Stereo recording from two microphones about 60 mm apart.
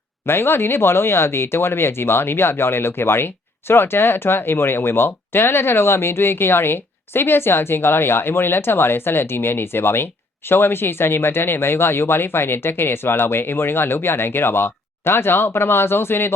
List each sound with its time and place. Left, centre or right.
0.3 s speech: left